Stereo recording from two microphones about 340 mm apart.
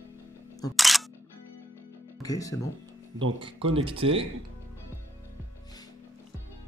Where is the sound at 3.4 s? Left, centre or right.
Centre.